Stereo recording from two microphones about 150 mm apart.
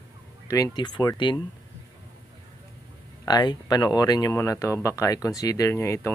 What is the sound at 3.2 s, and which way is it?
Speech, 25° left (ahead or behind).